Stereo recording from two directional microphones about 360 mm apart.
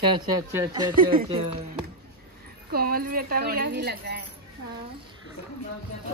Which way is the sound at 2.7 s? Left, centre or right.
Right.